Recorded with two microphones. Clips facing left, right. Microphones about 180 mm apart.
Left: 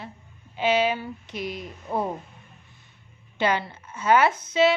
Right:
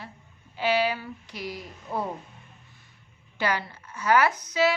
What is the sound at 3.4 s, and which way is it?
A woman's voice, 25° left (ahead or behind).